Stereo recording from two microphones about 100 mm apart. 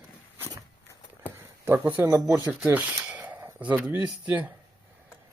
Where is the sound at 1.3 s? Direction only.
20° right (ahead or behind).